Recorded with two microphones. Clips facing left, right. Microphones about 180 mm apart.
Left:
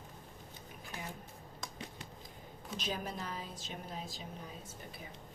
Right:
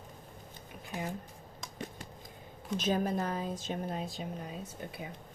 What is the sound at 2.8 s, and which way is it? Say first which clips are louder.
A woman's voice: right 10 dB; 50° right (ahead or behind).